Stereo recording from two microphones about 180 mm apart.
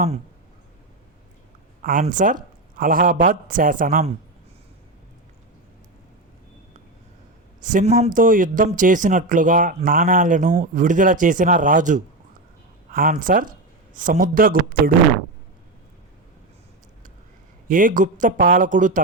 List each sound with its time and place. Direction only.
1.8 s speech: 50° right (ahead or behind)
7.6 s speech: 45° right (ahead or behind)
17.7 s speech: 50° right (ahead or behind)